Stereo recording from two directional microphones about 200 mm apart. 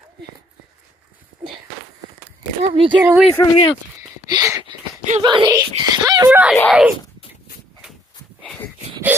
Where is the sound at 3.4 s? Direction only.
15° left (ahead or behind).